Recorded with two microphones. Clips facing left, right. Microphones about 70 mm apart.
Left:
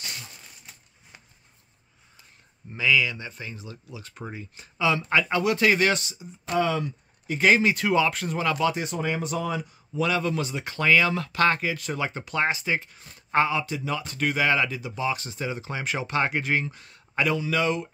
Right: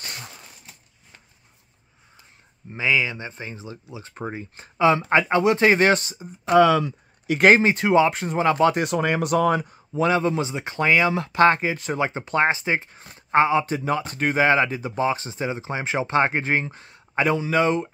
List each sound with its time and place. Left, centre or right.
0.0 s a sound: right
2.7 s speech: right
6.5 s speech: right
7.4 s speech: right
8.7 s speech: right
9.9 s speech: right
13.7 s speech: right